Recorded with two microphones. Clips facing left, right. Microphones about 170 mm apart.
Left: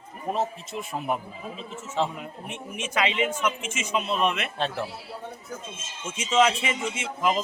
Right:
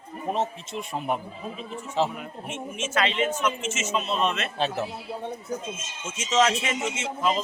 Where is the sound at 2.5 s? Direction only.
15° left (ahead or behind).